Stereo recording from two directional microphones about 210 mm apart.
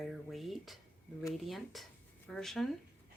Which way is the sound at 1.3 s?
Centre (ahead or behind).